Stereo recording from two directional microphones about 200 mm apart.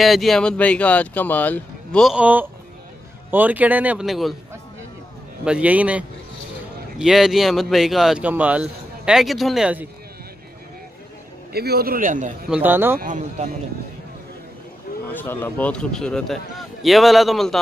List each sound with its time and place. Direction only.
0.0 s speech: centre (ahead or behind)
5.4 s speech: 5° right (ahead or behind)
11.5 s a man's voice: 50° right (ahead or behind)
12.4 s speech: 5° right (ahead or behind)
13.0 s speech: 40° right (ahead or behind)
15.1 s speech: 10° left (ahead or behind)